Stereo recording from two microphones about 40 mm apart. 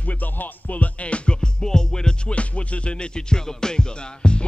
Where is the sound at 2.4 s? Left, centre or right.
Left.